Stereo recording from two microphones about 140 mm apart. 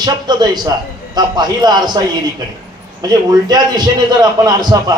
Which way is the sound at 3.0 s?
30° right (ahead or behind).